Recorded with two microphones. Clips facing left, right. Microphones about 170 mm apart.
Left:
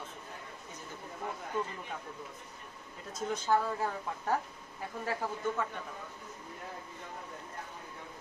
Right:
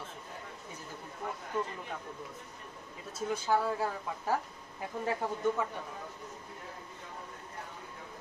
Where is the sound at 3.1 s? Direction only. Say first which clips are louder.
Even; 10° right (ahead or behind).